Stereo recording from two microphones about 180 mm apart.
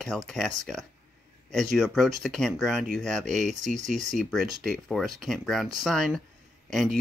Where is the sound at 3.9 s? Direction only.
Centre (ahead or behind).